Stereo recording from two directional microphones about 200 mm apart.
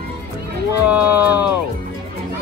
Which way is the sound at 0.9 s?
10° right (ahead or behind).